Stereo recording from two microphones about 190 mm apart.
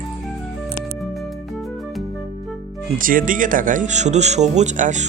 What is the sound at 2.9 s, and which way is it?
Speech, 45° right (ahead or behind).